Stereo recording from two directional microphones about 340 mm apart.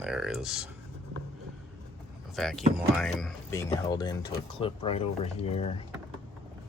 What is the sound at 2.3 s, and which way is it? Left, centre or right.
Speech, centre.